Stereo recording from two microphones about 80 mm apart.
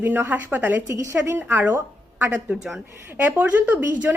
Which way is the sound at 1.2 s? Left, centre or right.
Right.